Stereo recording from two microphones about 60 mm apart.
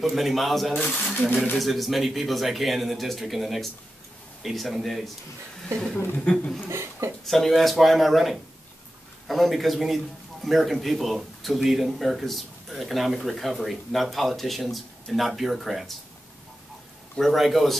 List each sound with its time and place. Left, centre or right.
0.0 s speech: centre
0.7 s speech: left
1.6 s speech: centre
6.7 s speech: right
7.2 s speech: centre
17.2 s speech: centre